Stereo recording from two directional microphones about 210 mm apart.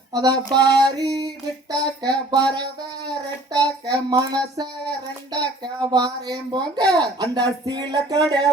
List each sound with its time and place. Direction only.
0.1 s speech: 20° right (ahead or behind)